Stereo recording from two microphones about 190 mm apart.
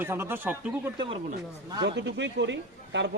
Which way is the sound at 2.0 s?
65° right (ahead or behind).